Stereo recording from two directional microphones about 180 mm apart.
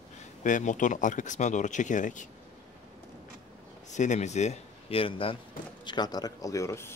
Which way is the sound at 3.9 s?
40° left (ahead or behind).